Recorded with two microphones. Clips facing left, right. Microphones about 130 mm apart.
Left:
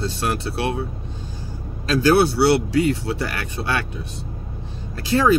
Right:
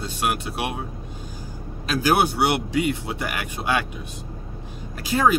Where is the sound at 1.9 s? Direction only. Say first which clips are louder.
Left 4 dB; 15° right (ahead or behind).